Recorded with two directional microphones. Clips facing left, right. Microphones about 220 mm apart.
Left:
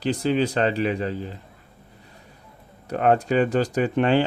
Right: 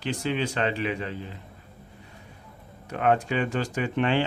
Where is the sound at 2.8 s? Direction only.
40° left (ahead or behind).